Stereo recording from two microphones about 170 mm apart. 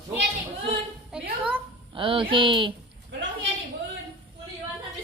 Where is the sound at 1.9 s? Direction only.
30° right (ahead or behind).